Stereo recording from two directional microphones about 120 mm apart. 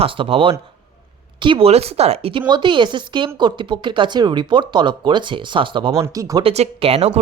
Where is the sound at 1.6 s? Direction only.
60° right (ahead or behind).